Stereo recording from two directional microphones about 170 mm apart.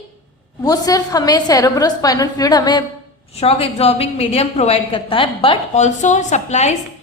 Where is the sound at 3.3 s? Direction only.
35° left (ahead or behind).